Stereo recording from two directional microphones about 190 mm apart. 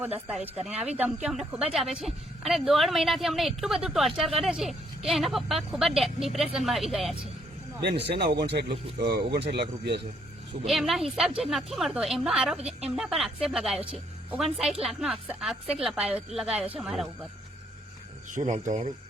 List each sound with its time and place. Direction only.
0.0 s speech: 5° right (ahead or behind)
7.8 s speech: 60° right (ahead or behind)
10.7 s speech: centre (ahead or behind)
18.3 s speech: 40° right (ahead or behind)